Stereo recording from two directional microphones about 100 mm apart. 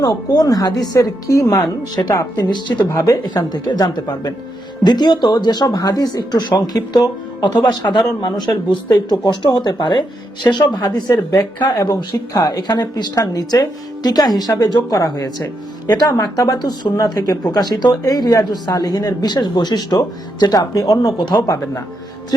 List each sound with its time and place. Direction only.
0.0 s speech: 40° left (ahead or behind)